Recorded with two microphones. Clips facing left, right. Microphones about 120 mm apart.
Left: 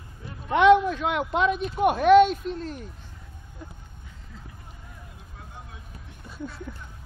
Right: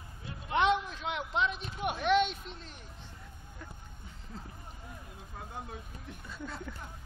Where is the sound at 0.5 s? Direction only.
60° left (ahead or behind).